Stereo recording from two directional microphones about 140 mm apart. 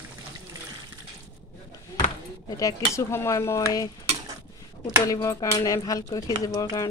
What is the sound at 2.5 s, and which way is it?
Speech, 20° left (ahead or behind).